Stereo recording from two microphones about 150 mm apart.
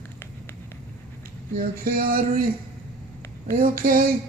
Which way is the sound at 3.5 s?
70° right (ahead or behind).